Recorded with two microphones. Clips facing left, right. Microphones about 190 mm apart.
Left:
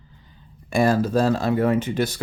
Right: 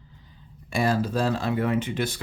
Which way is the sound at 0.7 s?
45° left (ahead or behind).